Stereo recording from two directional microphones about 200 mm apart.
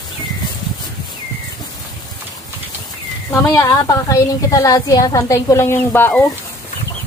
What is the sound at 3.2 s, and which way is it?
A woman's voice, 15° left (ahead or behind).